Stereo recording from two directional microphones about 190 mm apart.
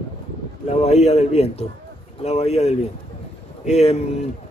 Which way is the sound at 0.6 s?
35° left (ahead or behind).